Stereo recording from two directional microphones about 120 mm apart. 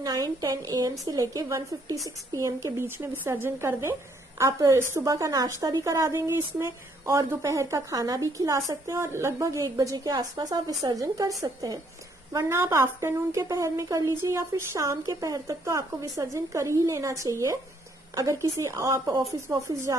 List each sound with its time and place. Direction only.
0.0 s a woman's voice: 30° right (ahead or behind)